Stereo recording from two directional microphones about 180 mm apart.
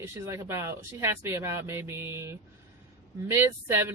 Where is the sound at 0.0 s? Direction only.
15° right (ahead or behind).